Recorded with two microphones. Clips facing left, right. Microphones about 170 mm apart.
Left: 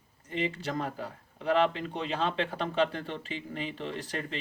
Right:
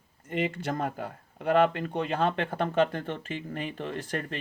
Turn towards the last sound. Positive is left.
turn(degrees=-50)  # may be behind; listen again after turning